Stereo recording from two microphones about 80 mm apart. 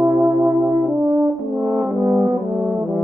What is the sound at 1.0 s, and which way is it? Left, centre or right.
French horn, right.